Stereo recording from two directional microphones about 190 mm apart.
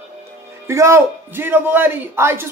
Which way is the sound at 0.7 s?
15° right (ahead or behind).